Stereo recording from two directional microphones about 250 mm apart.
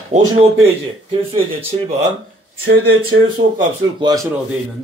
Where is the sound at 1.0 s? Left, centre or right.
Right.